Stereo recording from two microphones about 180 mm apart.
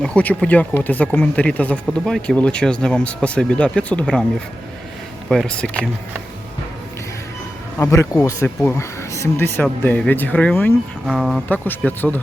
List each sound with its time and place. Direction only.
0.0 s speech: 5° left (ahead or behind)
5.3 s speech: 5° left (ahead or behind)
7.8 s speech: 15° left (ahead or behind)
11.0 s speech: centre (ahead or behind)
11.4 s speech: 10° left (ahead or behind)